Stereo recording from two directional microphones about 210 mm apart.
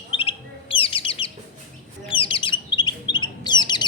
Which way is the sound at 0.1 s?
25° left (ahead or behind).